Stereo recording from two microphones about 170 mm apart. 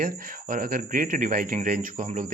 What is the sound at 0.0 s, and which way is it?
A man's voice, 55° right (ahead or behind).